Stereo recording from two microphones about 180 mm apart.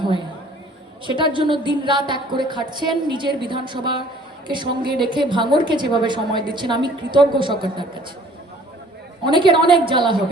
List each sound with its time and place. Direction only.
1.0 s a woman's voice: 25° right (ahead or behind)
9.2 s a woman's voice: 25° right (ahead or behind)